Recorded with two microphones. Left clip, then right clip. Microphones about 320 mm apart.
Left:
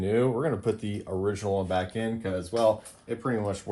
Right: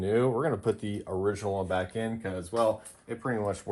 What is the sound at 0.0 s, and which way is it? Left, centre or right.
Speech, centre.